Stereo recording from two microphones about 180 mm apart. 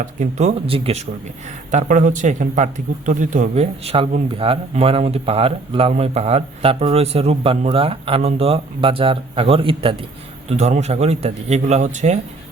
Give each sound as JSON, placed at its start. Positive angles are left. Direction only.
{"t": 0.0, "sound": "a man's voice", "side_deg": -45}